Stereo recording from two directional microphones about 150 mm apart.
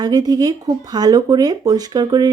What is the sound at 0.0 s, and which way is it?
Speech, 25° right (ahead or behind).